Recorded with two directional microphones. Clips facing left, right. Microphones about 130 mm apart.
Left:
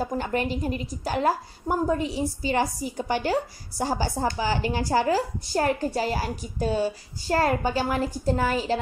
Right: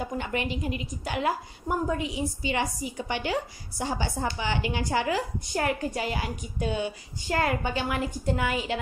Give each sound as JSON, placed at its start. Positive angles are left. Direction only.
{"t": 0.0, "sound": "a woman's voice", "side_deg": 40}